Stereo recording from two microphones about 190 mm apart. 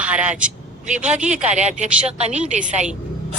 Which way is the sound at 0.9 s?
40° right (ahead or behind).